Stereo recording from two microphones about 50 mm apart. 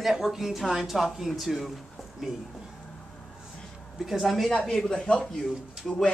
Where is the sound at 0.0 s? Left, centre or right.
Centre.